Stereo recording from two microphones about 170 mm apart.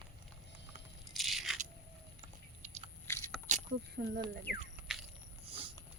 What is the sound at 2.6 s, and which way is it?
Biting, 45° right (ahead or behind).